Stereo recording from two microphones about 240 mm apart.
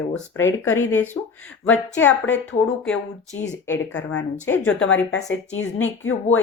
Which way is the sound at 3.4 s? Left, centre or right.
Centre.